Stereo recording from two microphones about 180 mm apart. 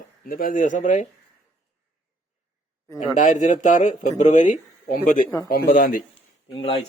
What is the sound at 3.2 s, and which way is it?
Speech, 45° left (ahead or behind).